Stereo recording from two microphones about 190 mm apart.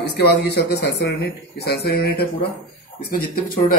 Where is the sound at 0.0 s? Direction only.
60° left (ahead or behind).